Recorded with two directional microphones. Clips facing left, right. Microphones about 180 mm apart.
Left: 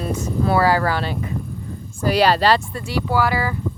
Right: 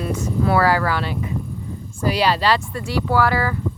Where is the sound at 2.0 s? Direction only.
45° left (ahead or behind).